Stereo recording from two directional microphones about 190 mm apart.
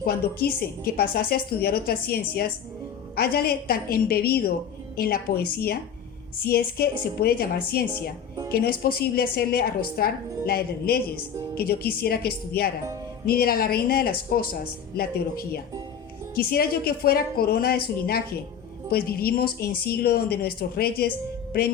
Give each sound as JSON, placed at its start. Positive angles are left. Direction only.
{"t": 0.0, "sound": "a woman's voice", "side_deg": 50}